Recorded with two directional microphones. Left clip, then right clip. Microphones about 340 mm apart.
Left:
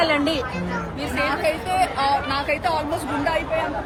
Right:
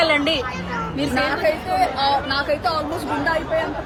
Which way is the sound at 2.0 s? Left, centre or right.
Centre.